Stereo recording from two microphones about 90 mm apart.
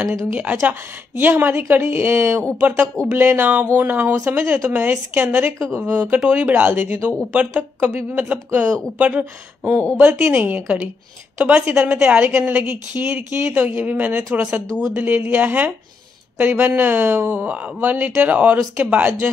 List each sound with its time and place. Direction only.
0.1 s speech: 35° right (ahead or behind)
0.7 s a woman's voice: 20° right (ahead or behind)